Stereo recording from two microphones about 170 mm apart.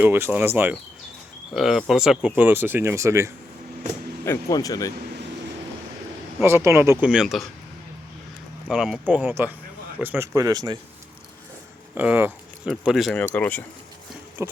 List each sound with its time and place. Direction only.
0.0 s speech: 10° right (ahead or behind)
4.3 s speech: 20° left (ahead or behind)
6.4 s speech: 15° right (ahead or behind)
8.7 s speech: 5° right (ahead or behind); by 10.8 s 20° right (ahead or behind)
11.9 s speech: 10° right (ahead or behind); by 13.7 s 10° left (ahead or behind)
14.4 s speech: 15° right (ahead or behind)